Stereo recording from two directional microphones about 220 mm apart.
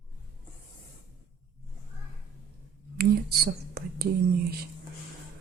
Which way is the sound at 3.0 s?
45° right (ahead or behind).